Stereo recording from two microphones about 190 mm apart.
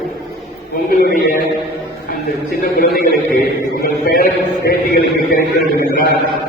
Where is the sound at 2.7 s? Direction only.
55° left (ahead or behind).